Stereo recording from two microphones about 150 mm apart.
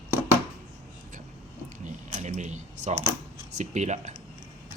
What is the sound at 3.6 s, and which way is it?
Speech, 50° right (ahead or behind).